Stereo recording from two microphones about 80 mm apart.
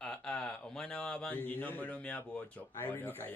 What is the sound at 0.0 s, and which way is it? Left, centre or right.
A man's voice, centre.